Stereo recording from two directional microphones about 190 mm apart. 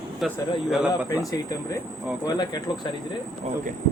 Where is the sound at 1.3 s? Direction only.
20° left (ahead or behind).